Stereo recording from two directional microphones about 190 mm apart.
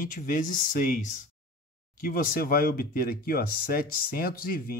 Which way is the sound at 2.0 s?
50° left (ahead or behind).